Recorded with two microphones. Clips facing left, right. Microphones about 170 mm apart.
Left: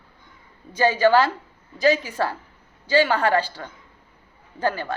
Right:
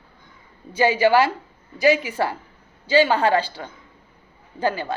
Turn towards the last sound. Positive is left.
turn(degrees=-15)  # may be behind; listen again after turning